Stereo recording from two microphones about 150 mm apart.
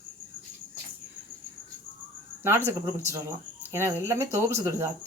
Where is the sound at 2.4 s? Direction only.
15° right (ahead or behind).